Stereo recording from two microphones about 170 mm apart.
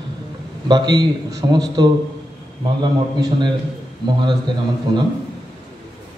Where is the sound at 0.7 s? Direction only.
25° right (ahead or behind).